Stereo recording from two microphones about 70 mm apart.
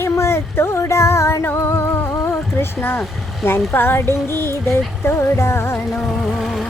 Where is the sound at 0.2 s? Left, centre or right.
Left.